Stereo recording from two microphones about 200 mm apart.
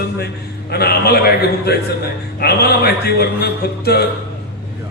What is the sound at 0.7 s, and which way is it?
Speech, 50° left (ahead or behind).